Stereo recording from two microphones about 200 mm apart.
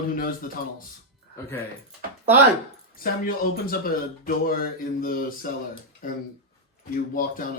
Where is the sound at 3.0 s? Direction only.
45° left (ahead or behind).